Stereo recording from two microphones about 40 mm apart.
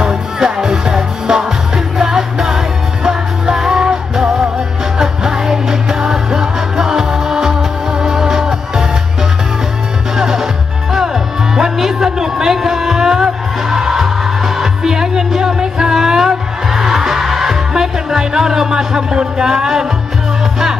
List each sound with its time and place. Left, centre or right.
0.0 s music: centre
10.1 s music: centre